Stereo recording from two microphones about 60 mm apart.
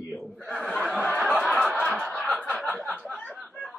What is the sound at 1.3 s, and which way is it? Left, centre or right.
Snicker, centre.